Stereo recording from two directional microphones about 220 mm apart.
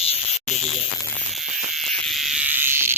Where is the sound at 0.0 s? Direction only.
30° left (ahead or behind).